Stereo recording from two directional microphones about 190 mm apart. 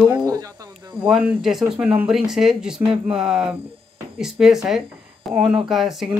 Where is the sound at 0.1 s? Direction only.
20° right (ahead or behind).